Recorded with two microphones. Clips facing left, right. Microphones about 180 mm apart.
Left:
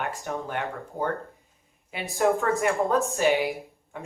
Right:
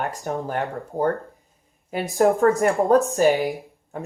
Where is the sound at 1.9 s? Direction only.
40° right (ahead or behind).